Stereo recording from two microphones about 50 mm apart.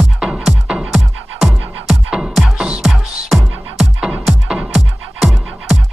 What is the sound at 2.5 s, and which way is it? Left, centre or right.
Music, centre.